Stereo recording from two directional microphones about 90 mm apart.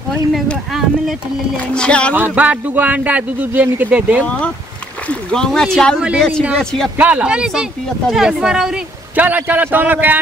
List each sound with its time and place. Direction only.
0.1 s speech: centre (ahead or behind)
1.7 s speech: 10° left (ahead or behind)
2.1 s a man's voice: 20° right (ahead or behind)
5.3 s speech: 5° left (ahead or behind)
7.0 s a man's voice: 15° right (ahead or behind)
9.1 s a man's voice: 20° right (ahead or behind)